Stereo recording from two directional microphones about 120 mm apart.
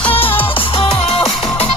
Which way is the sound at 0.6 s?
50° left (ahead or behind).